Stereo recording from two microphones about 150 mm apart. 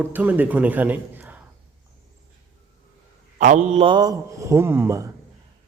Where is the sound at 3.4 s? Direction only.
55° right (ahead or behind).